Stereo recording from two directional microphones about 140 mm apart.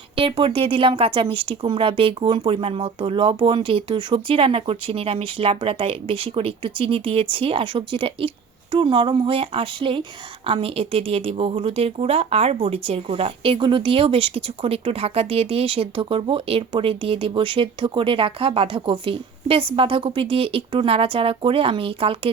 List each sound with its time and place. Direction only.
0.2 s speech: 40° right (ahead or behind)